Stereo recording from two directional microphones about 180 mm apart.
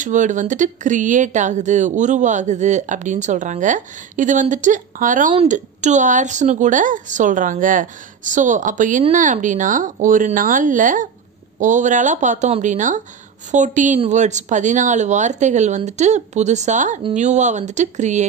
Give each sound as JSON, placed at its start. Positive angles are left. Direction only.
{"t": 0.0, "sound": "a woman's voice", "side_deg": -45}